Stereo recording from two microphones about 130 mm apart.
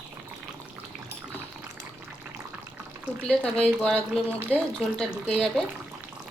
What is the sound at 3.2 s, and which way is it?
Speech, 5° left (ahead or behind).